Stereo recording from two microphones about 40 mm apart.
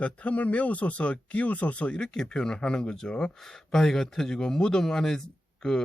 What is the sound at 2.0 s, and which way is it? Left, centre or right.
Speech, centre.